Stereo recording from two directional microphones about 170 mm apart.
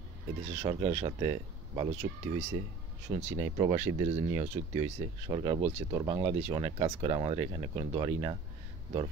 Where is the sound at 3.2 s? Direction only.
30° right (ahead or behind).